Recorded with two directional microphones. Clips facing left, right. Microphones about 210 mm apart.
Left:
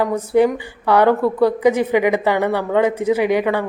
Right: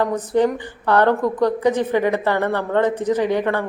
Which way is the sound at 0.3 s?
10° left (ahead or behind).